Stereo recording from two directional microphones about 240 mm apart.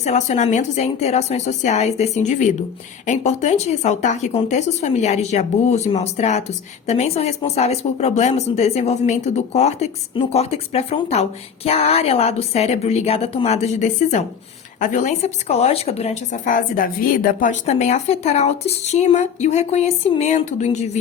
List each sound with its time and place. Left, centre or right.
0.0 s speech: left